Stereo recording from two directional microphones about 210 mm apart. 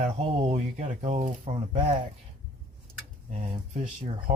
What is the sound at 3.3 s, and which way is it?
Speech, 35° right (ahead or behind).